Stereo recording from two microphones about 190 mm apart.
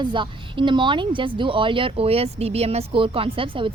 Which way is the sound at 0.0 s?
25° right (ahead or behind).